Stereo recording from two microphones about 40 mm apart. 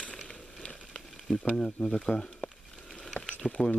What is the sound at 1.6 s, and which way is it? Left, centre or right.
Speech, left.